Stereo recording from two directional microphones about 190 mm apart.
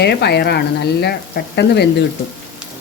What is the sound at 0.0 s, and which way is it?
Speech, 60° left (ahead or behind).